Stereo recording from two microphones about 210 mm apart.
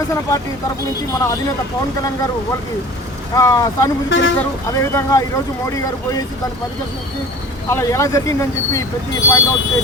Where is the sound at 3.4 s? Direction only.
15° left (ahead or behind).